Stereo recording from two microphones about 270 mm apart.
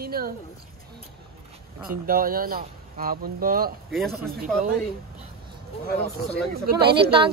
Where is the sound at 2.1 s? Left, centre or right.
Right.